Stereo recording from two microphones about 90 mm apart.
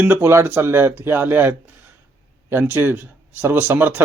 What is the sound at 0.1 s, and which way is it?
Speech, 25° right (ahead or behind).